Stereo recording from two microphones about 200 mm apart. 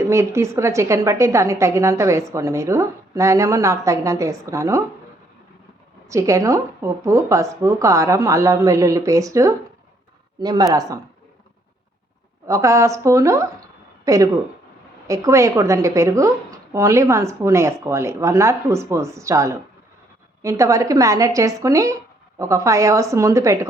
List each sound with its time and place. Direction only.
0.1 s a woman's voice: 15° right (ahead or behind)
6.1 s a woman's voice: 15° right (ahead or behind)
12.5 s a woman's voice: 15° right (ahead or behind)